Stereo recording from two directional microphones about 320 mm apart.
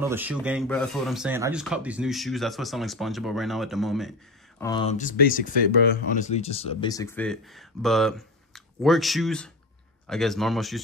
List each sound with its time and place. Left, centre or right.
0.0 s speech: centre
4.6 s speech: centre